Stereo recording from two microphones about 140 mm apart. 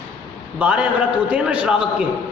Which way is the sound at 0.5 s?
10° right (ahead or behind).